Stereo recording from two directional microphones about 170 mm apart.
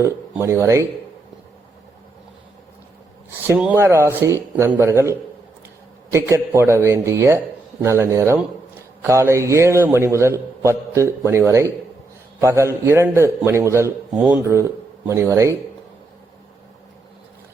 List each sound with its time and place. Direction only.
0.0 s a man's voice: 15° right (ahead or behind)
3.4 s a man's voice: 10° right (ahead or behind)